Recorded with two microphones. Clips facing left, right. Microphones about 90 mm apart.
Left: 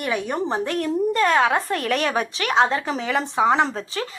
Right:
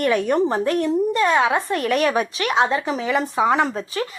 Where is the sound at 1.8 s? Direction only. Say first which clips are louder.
Right 3 dB; 30° right (ahead or behind).